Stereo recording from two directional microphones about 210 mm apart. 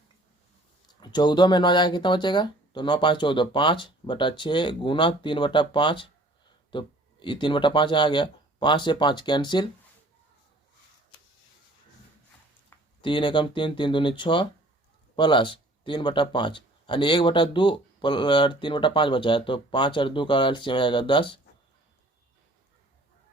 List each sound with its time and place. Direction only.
1.0 s speech: 20° left (ahead or behind)
13.0 s speech: 25° left (ahead or behind)